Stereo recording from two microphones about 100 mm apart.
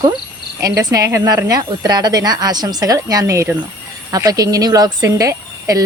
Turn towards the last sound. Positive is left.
turn(degrees=-35)  # may be behind; listen again after turning